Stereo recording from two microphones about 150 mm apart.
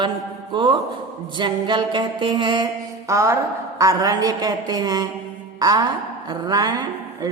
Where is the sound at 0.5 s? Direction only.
30° right (ahead or behind).